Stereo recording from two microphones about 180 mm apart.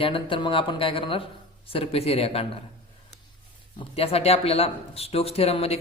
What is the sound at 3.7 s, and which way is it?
Speech, 35° left (ahead or behind).